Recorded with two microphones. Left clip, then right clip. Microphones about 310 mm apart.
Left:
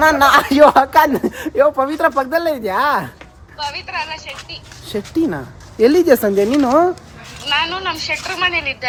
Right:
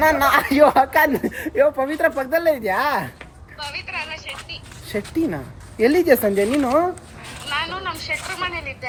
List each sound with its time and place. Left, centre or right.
0.3 s speech: centre
3.6 s a sound: centre
5.8 s a woman's voice: centre